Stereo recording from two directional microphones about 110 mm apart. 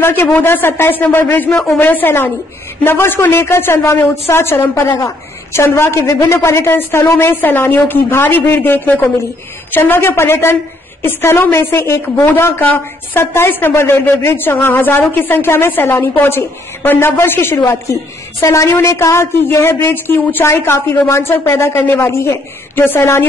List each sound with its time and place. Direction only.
0.0 s a woman's voice: 20° left (ahead or behind)
1.5 s speech: 5° left (ahead or behind)
1.8 s a woman's voice: 15° left (ahead or behind)